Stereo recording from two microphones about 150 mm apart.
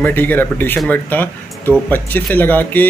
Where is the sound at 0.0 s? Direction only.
10° left (ahead or behind).